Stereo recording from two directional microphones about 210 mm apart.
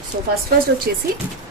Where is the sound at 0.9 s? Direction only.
45° right (ahead or behind).